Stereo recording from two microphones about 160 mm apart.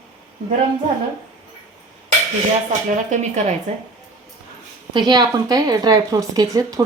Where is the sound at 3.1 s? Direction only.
45° right (ahead or behind).